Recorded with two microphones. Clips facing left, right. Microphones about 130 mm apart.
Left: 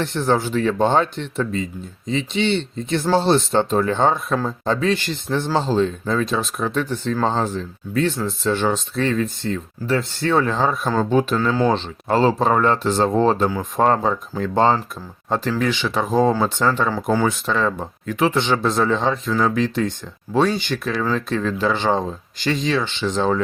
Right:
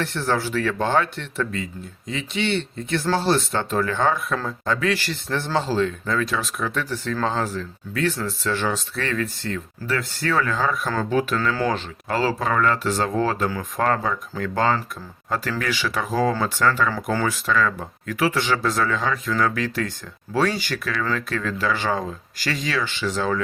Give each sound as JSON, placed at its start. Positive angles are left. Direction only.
{"t": 0.0, "sound": "speech", "side_deg": 20}
{"t": 17.3, "sound": "speech", "side_deg": 25}